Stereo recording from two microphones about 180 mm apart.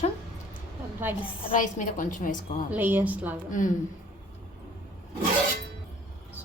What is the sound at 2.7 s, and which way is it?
Speech, 10° right (ahead or behind).